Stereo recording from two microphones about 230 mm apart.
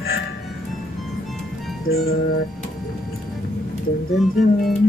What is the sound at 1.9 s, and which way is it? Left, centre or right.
Music, left.